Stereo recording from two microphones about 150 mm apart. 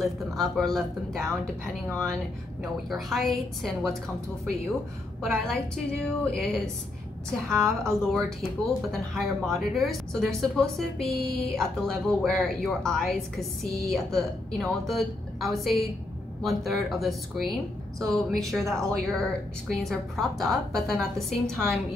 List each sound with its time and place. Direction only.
0.0 s speech: centre (ahead or behind)
5.2 s speech: 5° left (ahead or behind)
7.5 s a woman's voice: 15° right (ahead or behind)
8.0 s speech: 5° left (ahead or behind)